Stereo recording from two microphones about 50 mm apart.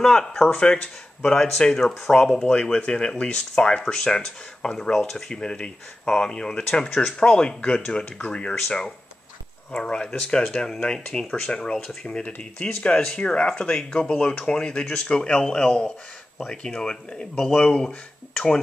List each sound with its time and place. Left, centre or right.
0.0 s speech: centre
4.9 s speech: centre
11.8 s speech: centre
12.4 s speech: left